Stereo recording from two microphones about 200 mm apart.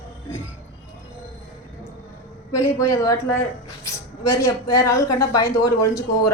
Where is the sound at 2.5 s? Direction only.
15° left (ahead or behind).